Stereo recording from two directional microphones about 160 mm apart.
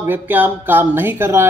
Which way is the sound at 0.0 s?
10° right (ahead or behind).